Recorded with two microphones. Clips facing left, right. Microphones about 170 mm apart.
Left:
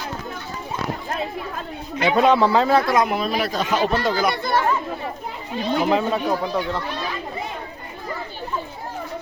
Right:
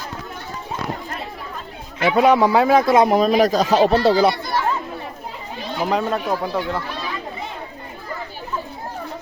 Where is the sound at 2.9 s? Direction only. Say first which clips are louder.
Right 6 dB; 35° right (ahead or behind).